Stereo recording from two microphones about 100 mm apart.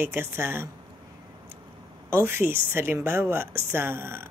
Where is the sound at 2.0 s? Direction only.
25° right (ahead or behind).